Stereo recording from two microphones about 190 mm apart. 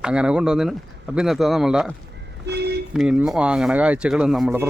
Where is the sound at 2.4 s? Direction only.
60° right (ahead or behind).